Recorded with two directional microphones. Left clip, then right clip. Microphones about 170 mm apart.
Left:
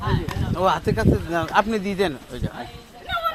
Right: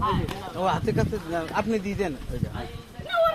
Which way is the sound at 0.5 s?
65° left (ahead or behind).